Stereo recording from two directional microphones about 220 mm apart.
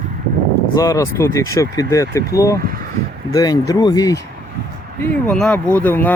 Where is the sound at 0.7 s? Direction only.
15° left (ahead or behind).